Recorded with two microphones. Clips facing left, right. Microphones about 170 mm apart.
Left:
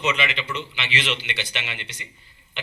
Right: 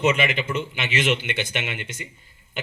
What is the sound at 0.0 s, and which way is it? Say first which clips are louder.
A man's voice: right 4 dB; 50° right (ahead or behind).